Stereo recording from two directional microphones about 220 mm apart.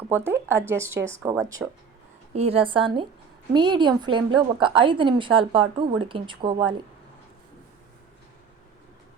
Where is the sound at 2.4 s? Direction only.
25° right (ahead or behind).